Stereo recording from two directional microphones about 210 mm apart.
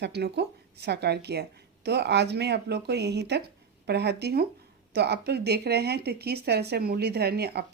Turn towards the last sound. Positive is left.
turn(degrees=-50)  # may be behind; listen again after turning